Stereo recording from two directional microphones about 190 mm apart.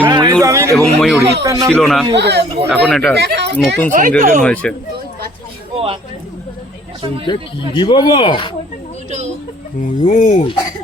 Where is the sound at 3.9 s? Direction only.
45° right (ahead or behind).